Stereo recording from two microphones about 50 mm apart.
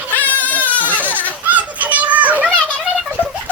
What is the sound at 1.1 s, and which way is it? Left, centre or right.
Baby laughter, left.